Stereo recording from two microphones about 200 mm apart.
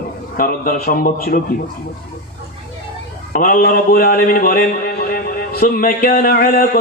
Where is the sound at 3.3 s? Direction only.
45° left (ahead or behind).